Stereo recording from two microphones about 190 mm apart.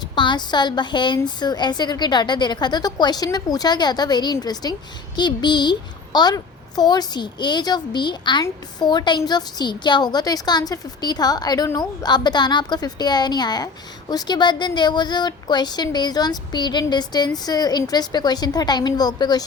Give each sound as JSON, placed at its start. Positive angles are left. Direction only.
{"t": 0.2, "sound": "a woman's voice", "side_deg": 25}